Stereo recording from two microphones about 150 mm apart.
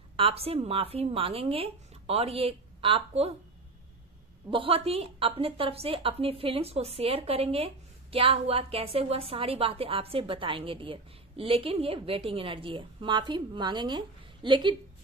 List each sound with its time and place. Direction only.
0.1 s a woman's voice: 40° right (ahead or behind)
4.5 s a woman's voice: 35° right (ahead or behind)